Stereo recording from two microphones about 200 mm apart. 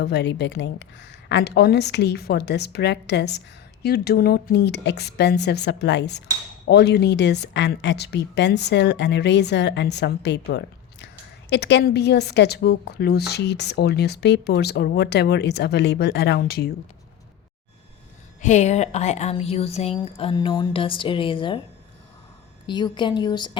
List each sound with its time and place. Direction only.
0.0 s a woman's voice: 60° left (ahead or behind)
18.4 s a woman's voice: 35° left (ahead or behind)
22.6 s a woman's voice: 20° left (ahead or behind)